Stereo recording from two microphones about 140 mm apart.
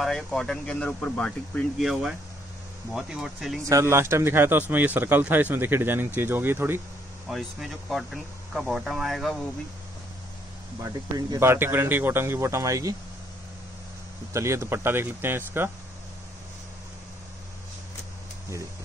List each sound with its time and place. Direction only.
0.0 s speech: 5° left (ahead or behind)
3.6 s speech: 20° right (ahead or behind)
7.2 s speech: centre (ahead or behind)
10.8 s speech: 25° right (ahead or behind)
14.3 s speech: 20° right (ahead or behind)